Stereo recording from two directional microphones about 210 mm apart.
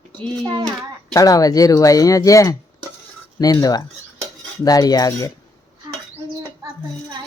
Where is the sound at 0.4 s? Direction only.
20° right (ahead or behind).